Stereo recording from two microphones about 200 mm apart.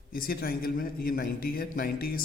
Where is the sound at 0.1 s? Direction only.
50° left (ahead or behind).